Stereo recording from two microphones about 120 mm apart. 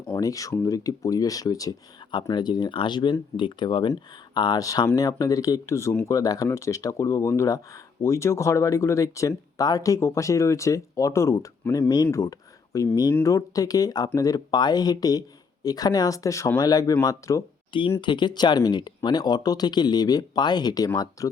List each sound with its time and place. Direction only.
0.2 s speech: 30° left (ahead or behind)
11.8 s speech: 35° left (ahead or behind)
12.1 s a sound: 30° left (ahead or behind)
13.2 s speech: 30° left (ahead or behind)
17.7 s speech: 45° left (ahead or behind)